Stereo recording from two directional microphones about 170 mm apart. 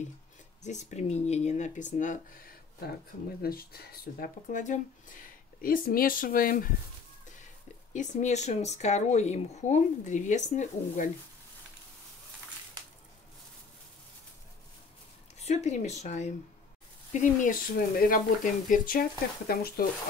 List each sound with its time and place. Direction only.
0.6 s speech: 45° left (ahead or behind)
3.4 s speech: 65° left (ahead or behind)
7.9 s speech: 45° left (ahead or behind)
15.3 s speech: 40° left (ahead or behind); by 19.9 s 60° left (ahead or behind)